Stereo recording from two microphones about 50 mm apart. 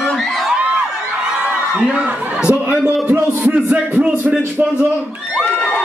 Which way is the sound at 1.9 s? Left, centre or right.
Right.